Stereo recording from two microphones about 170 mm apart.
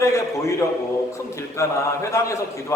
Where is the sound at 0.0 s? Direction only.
15° left (ahead or behind).